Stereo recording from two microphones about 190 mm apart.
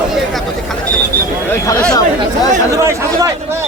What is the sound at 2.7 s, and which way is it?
Speech, 15° right (ahead or behind).